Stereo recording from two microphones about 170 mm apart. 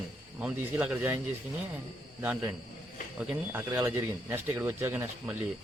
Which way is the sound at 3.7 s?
15° right (ahead or behind).